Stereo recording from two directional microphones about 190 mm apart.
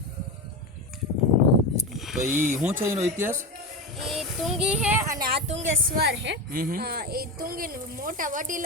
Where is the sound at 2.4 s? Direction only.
10° right (ahead or behind).